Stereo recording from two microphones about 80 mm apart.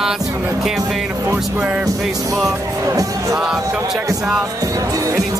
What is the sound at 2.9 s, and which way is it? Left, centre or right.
Speech, right.